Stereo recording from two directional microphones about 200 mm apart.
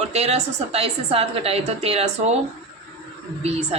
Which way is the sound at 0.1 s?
30° right (ahead or behind).